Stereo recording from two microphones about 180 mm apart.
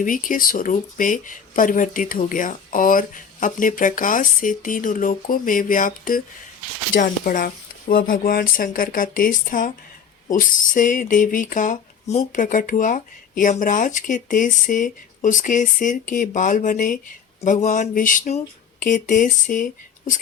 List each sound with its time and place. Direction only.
0.0 s speech: 50° left (ahead or behind)